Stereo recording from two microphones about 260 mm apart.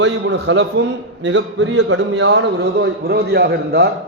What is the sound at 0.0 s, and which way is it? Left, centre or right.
A man's voice, right.